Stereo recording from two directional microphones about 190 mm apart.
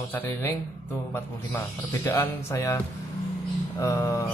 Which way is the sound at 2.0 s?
15° left (ahead or behind).